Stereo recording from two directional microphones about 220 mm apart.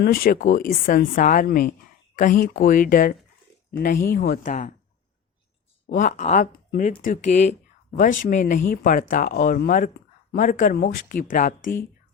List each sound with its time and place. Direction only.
0.0 s speech: 45° left (ahead or behind)
5.9 s speech: 35° left (ahead or behind)